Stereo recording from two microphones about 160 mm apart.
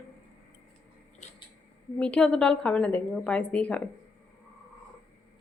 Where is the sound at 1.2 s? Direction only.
45° left (ahead or behind).